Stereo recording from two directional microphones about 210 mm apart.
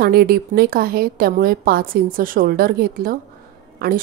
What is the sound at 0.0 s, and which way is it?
A woman's voice, 50° right (ahead or behind).